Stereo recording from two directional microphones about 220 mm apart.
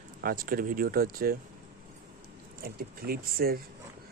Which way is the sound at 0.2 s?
40° right (ahead or behind).